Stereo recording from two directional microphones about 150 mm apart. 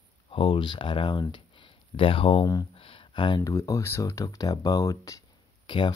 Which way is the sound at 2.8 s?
35° left (ahead or behind).